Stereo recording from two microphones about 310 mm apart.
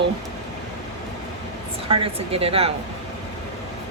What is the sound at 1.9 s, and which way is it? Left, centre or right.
Speech, centre.